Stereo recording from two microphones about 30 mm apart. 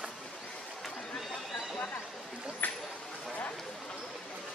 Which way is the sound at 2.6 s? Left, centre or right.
Left.